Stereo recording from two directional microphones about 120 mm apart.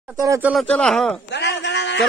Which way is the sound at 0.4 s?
5° right (ahead or behind).